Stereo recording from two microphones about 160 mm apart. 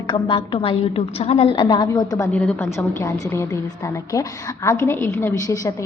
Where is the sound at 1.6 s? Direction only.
25° left (ahead or behind).